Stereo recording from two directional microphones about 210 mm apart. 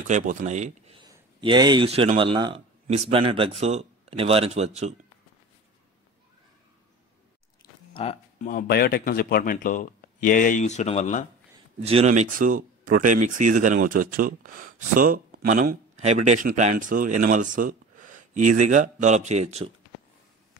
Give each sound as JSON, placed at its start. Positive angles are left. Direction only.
{"t": 0.1, "sound": "speech", "side_deg": -35}
{"t": 7.9, "sound": "a sound", "side_deg": 30}
{"t": 8.5, "sound": "a man's voice", "side_deg": 45}
{"t": 11.8, "sound": "speech", "side_deg": -30}